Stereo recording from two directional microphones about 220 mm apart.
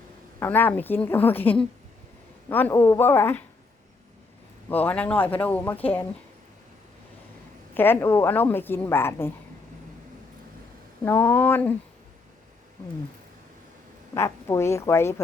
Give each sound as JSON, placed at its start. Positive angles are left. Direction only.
{"t": 0.3, "sound": "a woman's voice", "side_deg": 10}
{"t": 4.7, "sound": "a woman's voice", "side_deg": 5}
{"t": 7.7, "sound": "a woman's voice", "side_deg": 10}
{"t": 11.0, "sound": "a woman's voice", "side_deg": 10}
{"t": 14.1, "sound": "a woman's voice", "side_deg": 15}